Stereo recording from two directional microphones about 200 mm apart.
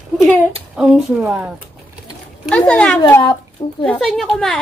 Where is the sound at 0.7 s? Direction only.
5° right (ahead or behind).